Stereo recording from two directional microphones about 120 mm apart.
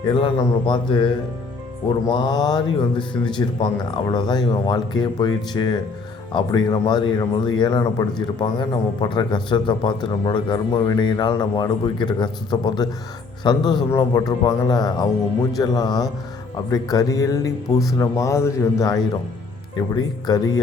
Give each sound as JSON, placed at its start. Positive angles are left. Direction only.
{"t": 0.0, "sound": "a man's voice", "side_deg": 40}